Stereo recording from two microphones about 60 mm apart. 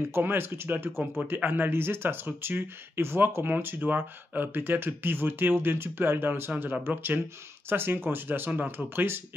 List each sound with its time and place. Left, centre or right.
0.2 s speech: right